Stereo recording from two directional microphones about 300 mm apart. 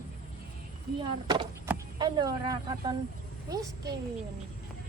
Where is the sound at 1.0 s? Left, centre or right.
Centre.